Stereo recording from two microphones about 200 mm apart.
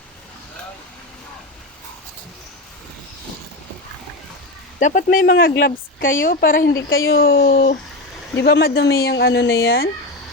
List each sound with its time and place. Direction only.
4.8 s speech: 40° left (ahead or behind)
5.4 s speech: 55° left (ahead or behind)
6.7 s speech: 70° left (ahead or behind)
7.2 s speech: 50° left (ahead or behind)